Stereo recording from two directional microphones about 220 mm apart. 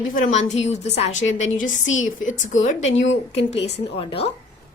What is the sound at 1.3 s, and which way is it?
A woman's voice, 35° left (ahead or behind).